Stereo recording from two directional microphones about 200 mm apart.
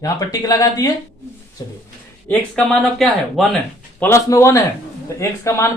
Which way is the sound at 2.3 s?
Centre (ahead or behind).